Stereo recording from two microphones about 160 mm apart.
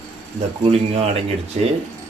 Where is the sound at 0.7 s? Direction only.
40° right (ahead or behind).